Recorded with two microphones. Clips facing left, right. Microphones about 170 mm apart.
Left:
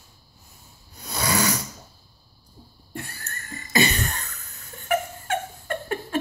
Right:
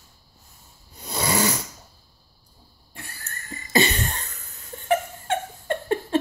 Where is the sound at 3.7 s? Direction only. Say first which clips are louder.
Right 1 dB; 25° right (ahead or behind).